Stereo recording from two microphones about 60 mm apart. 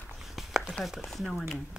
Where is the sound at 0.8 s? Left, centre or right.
Centre.